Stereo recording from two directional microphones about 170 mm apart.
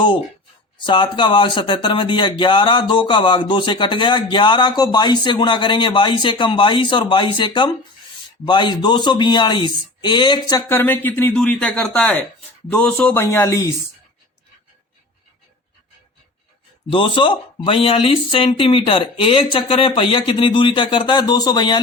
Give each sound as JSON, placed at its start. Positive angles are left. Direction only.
{"t": 0.8, "sound": "speech", "side_deg": 30}
{"t": 10.7, "sound": "speech", "side_deg": 10}
{"t": 16.9, "sound": "speech", "side_deg": 30}